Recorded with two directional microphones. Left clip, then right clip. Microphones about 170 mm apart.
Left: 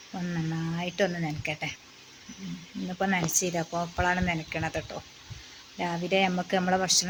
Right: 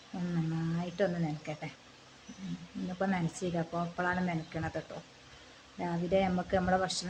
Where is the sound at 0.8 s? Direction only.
20° left (ahead or behind).